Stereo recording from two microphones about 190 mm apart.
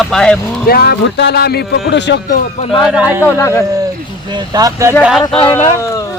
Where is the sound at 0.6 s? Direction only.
55° left (ahead or behind).